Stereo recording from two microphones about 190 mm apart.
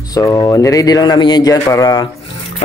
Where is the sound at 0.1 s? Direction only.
20° left (ahead or behind).